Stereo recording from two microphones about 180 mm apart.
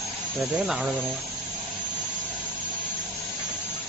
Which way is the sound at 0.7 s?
Centre (ahead or behind).